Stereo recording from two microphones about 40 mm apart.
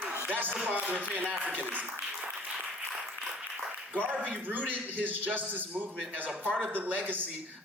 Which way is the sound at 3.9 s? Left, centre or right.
Right.